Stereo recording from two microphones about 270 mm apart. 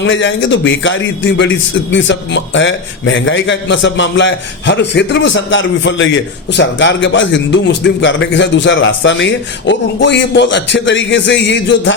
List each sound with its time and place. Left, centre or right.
0.0 s a man's voice: left